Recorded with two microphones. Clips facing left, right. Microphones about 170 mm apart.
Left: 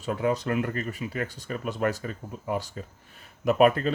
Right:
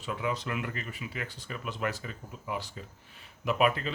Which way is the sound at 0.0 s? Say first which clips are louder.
Left 7 dB; 45° left (ahead or behind).